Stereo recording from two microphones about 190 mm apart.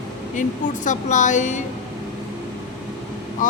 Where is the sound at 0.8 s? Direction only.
40° left (ahead or behind).